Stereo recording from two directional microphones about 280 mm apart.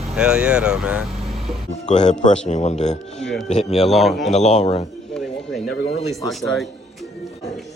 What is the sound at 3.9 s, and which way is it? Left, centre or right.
Speech, centre.